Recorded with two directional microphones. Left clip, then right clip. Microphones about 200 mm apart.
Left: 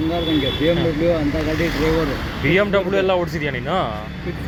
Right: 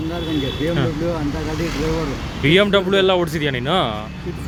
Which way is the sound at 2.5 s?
40° right (ahead or behind).